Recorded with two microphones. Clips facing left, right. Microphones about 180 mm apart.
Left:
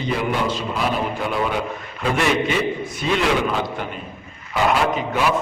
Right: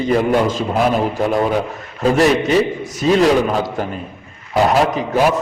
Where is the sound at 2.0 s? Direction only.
40° right (ahead or behind).